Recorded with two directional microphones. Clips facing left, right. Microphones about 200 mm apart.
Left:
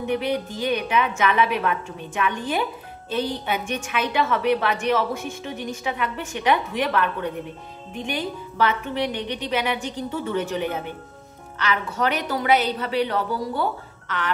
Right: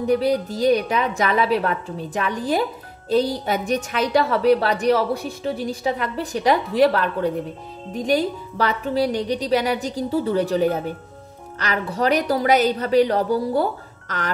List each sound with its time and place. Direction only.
0.0 s a woman's voice: 35° right (ahead or behind)